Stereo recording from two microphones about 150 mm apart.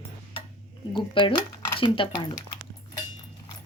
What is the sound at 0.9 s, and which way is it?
Speech, 35° left (ahead or behind).